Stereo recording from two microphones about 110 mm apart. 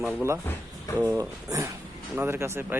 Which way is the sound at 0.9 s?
25° right (ahead or behind).